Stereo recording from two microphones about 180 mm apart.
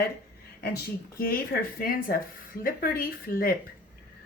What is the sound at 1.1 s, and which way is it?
A woman's voice, 55° left (ahead or behind).